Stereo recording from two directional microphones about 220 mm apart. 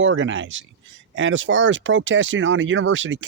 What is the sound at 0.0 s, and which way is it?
Speech, 60° right (ahead or behind).